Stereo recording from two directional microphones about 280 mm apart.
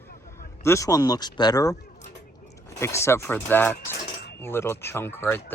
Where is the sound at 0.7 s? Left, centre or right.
Centre.